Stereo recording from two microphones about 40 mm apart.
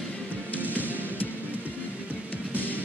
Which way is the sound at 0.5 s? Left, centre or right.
Left.